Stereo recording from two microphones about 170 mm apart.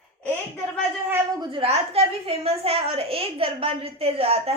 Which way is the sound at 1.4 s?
30° right (ahead or behind).